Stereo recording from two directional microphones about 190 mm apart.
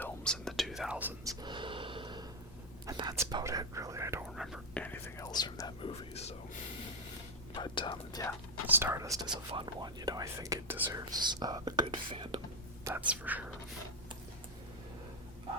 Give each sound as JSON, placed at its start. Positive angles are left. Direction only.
{"t": 0.0, "sound": "whispering", "side_deg": 5}
{"t": 1.4, "sound": "a sound", "side_deg": -25}
{"t": 2.8, "sound": "speech", "side_deg": -20}
{"t": 4.4, "sound": "speech", "side_deg": 0}
{"t": 4.8, "sound": "speech", "side_deg": 10}
{"t": 7.5, "sound": "speech", "side_deg": 25}
{"t": 8.6, "sound": "speech", "side_deg": -10}
{"t": 12.8, "sound": "speech", "side_deg": -10}